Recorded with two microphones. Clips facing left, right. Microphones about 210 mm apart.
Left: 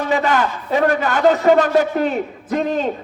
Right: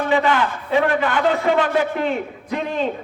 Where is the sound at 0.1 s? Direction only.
40° left (ahead or behind).